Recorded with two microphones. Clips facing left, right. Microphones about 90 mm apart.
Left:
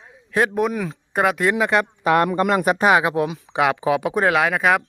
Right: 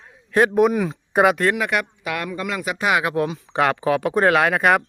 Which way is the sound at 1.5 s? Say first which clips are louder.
Left 4 dB; 25° left (ahead or behind).